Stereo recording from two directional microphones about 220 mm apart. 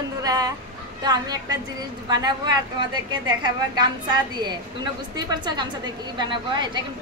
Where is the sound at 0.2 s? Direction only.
15° right (ahead or behind).